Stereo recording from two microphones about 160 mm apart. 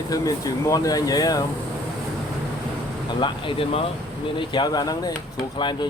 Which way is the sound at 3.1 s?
30° left (ahead or behind).